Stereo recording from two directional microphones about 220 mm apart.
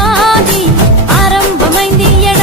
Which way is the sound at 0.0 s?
Centre (ahead or behind).